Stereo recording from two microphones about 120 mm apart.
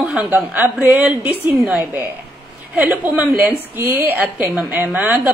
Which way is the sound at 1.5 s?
Centre (ahead or behind).